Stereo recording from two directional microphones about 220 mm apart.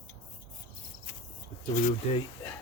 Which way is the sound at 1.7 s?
35° left (ahead or behind).